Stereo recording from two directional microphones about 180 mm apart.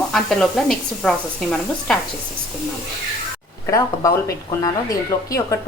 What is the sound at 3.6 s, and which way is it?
Speech, 15° left (ahead or behind).